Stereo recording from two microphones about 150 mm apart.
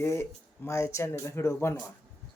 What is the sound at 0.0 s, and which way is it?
Speech, 15° left (ahead or behind).